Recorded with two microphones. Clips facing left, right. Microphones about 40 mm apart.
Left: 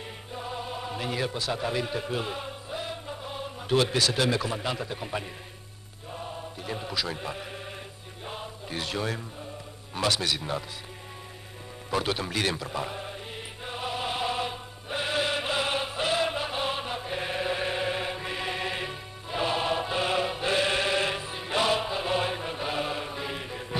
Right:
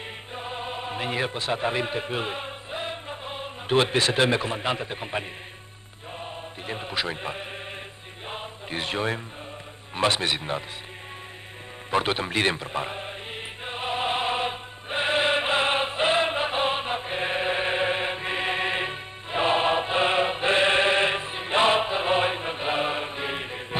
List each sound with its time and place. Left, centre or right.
0.3 s a man's voice: right
6.1 s chant: right
8.3 s music: right
9.9 s a man's voice: right
11.9 s chant: right